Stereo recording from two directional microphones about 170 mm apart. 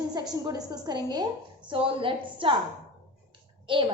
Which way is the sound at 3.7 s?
30° right (ahead or behind).